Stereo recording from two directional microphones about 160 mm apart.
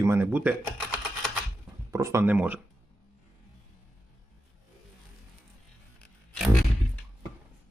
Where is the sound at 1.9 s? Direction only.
20° right (ahead or behind).